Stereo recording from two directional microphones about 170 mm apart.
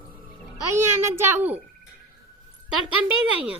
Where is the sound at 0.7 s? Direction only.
15° right (ahead or behind).